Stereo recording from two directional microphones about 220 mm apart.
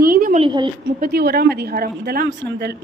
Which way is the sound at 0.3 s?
25° right (ahead or behind).